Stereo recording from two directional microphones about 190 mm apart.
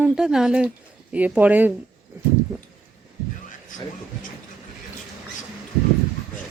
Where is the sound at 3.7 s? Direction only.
45° left (ahead or behind).